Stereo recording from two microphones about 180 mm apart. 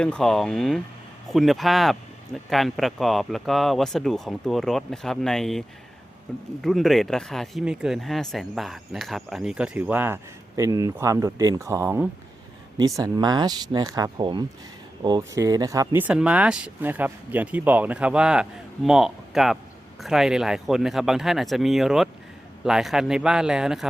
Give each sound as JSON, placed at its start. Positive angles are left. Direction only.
{"t": 0.0, "sound": "speech", "side_deg": 5}